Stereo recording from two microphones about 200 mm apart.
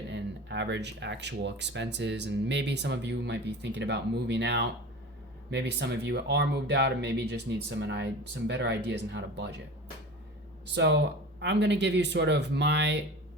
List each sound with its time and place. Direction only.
0.1 s speech: 60° right (ahead or behind)
10.8 s speech: 60° right (ahead or behind)